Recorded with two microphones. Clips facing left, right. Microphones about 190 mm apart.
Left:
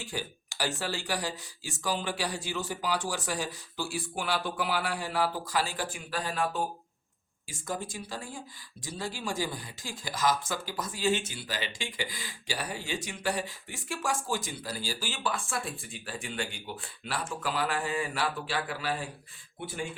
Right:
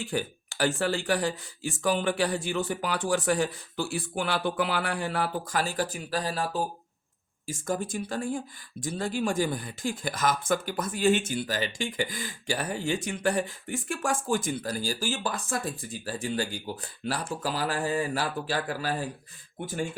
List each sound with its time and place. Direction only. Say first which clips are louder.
0.0 s speech: right 6 dB; 55° right (ahead or behind); by 6.6 s 35° right (ahead or behind)
7.4 s speech: right 6 dB; 45° right (ahead or behind)